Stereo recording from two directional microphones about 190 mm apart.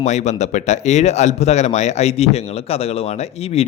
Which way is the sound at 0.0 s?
35° left (ahead or behind).